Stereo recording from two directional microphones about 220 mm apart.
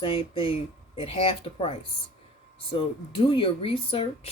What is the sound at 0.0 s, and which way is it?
Speech, 25° left (ahead or behind).